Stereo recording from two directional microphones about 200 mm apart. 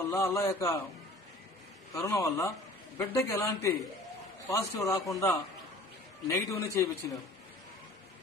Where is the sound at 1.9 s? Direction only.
15° left (ahead or behind).